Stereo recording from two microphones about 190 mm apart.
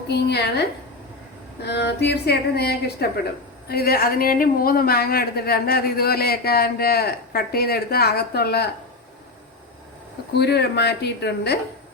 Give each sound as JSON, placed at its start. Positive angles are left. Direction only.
{"t": 0.1, "sound": "a woman's voice", "side_deg": 60}
{"t": 1.6, "sound": "a woman's voice", "side_deg": 60}
{"t": 10.3, "sound": "a woman's voice", "side_deg": 60}